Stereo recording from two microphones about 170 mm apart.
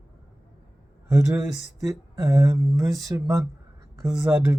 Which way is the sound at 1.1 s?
15° right (ahead or behind).